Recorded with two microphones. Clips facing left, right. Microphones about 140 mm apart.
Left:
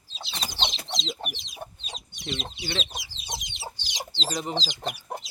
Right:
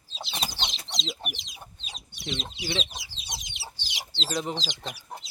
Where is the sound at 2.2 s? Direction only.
Centre (ahead or behind).